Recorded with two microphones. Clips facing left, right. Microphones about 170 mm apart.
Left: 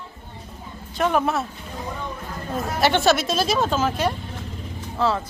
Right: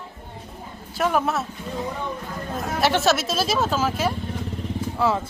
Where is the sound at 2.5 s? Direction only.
Centre (ahead or behind).